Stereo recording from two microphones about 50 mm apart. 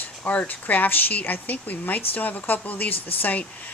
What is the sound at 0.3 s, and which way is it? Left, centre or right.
Speech, left.